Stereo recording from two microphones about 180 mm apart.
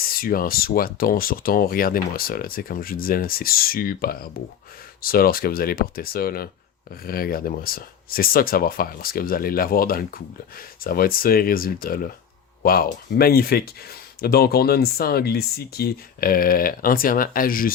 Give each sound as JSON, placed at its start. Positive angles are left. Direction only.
{"t": 0.0, "sound": "speech", "side_deg": 55}